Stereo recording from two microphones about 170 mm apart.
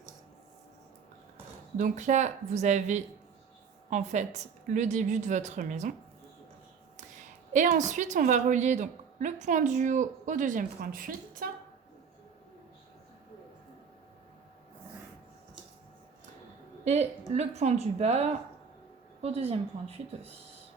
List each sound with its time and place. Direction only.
1.8 s a woman's voice: 45° right (ahead or behind)
7.5 s a woman's voice: 45° right (ahead or behind)
16.8 s a woman's voice: 40° right (ahead or behind)